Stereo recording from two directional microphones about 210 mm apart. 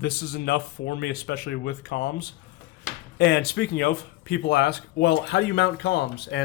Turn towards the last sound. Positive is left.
turn(degrees=55)  # may be behind; listen again after turning